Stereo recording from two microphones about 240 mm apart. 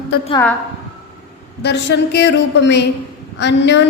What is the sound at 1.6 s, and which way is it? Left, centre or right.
Speech, left.